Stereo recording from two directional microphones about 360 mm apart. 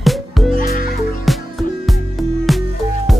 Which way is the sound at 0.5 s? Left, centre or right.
Left.